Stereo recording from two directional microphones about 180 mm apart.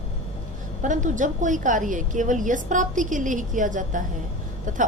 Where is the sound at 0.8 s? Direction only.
45° right (ahead or behind).